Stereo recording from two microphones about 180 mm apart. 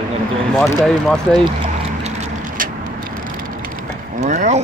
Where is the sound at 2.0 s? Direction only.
40° right (ahead or behind).